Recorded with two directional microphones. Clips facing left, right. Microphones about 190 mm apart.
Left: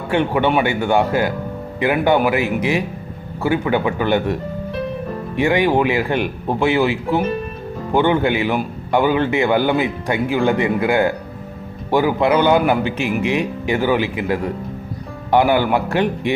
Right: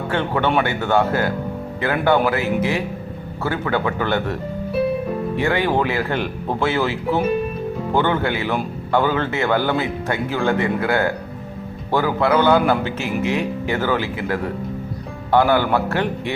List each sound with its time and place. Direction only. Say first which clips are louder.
0.1 s a man's voice: left 4 dB; 15° left (ahead or behind)
5.4 s a man's voice: left 5 dB; 15° left (ahead or behind)